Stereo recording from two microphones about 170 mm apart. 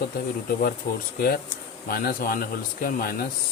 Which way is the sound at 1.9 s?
55° left (ahead or behind).